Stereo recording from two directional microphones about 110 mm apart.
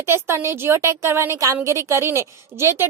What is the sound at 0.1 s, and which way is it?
Speech, 25° right (ahead or behind).